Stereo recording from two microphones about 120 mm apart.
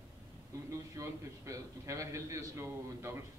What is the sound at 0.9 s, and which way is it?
A man's voice, 25° right (ahead or behind).